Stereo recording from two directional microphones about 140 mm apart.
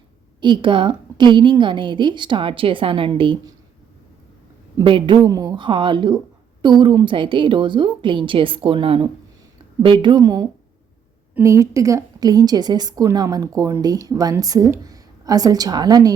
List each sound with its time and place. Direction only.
0.4 s a woman's voice: 35° right (ahead or behind)
4.8 s a woman's voice: 35° right (ahead or behind)
11.4 s speech: 20° right (ahead or behind)